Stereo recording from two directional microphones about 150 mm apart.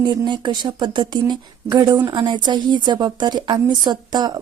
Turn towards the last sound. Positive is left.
turn(degrees=-30)  # may be behind; listen again after turning